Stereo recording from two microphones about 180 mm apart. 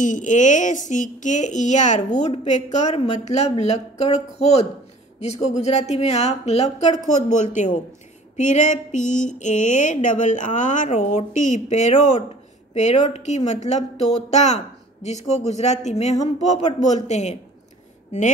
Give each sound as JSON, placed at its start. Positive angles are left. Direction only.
{"t": 0.0, "sound": "speech", "side_deg": 45}